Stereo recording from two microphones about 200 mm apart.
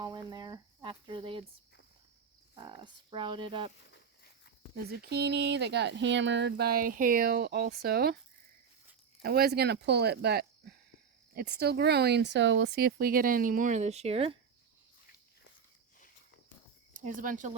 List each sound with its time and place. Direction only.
0.0 s a sound: 20° right (ahead or behind)
2.6 s speech: 25° right (ahead or behind)
4.9 s speech: 55° right (ahead or behind)
9.2 s speech: 50° right (ahead or behind); by 14.3 s 30° right (ahead or behind)
16.9 s speech: 40° right (ahead or behind)